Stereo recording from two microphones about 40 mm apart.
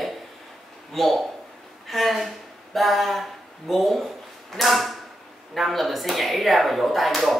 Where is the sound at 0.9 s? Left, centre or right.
Centre.